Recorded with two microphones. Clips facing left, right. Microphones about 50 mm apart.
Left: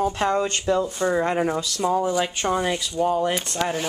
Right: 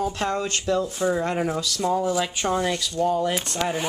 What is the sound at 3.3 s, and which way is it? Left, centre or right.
Speech, centre.